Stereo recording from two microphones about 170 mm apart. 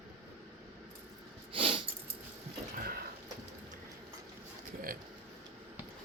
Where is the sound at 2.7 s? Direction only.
60° right (ahead or behind).